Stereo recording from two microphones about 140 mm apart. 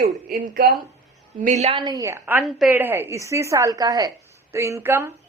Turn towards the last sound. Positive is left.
turn(degrees=-15)  # may be behind; listen again after turning